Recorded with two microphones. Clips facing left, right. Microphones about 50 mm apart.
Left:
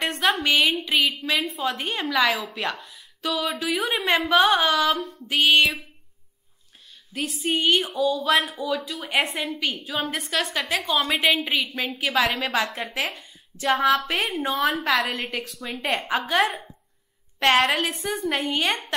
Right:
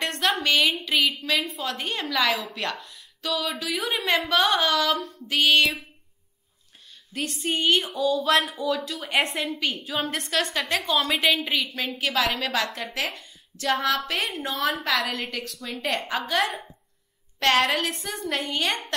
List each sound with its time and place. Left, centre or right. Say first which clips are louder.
0.0 s a woman's voice: left 2 dB; centre
7.2 s a woman's voice: left 2 dB; centre
12.5 s a woman's voice: left 2 dB; left
12.9 s a woman's voice: left 1 dB; centre
14.7 s a woman's voice: left 2 dB; centre
17.6 s a woman's voice: left 2 dB; centre